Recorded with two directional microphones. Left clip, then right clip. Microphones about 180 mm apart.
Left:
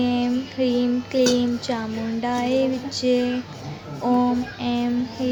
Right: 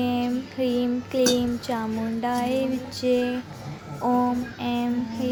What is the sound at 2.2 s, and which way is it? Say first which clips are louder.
Speech: left 3 dB; 10° right (ahead or behind).